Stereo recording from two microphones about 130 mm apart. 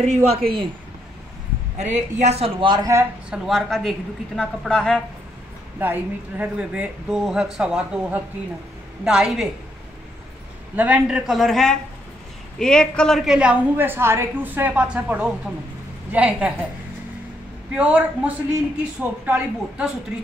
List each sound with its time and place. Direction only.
0.0 s a man's voice: 55° right (ahead or behind)
1.8 s a woman's voice: 60° right (ahead or behind)
2.6 s speech: 35° right (ahead or behind)
3.3 s speech: centre (ahead or behind)
5.8 s a woman's voice: 15° right (ahead or behind)
10.8 s a woman's voice: 10° right (ahead or behind)
17.7 s a woman's voice: 10° right (ahead or behind)